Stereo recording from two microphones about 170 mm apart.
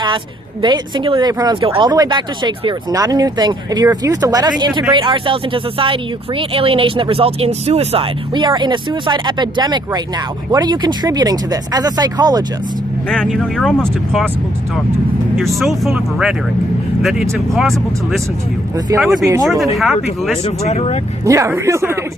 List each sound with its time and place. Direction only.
0.6 s speech: 30° right (ahead or behind)
13.1 s speech: centre (ahead or behind)
15.4 s speech: centre (ahead or behind)
19.2 s speech: 20° right (ahead or behind)
19.7 s speech: centre (ahead or behind)
20.4 s speech: 40° left (ahead or behind)
21.2 s speech: 15° right (ahead or behind)